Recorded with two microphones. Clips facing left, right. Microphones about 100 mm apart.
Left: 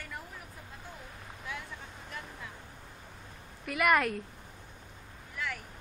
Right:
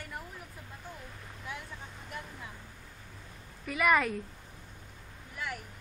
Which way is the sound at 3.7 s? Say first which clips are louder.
Even; centre (ahead or behind).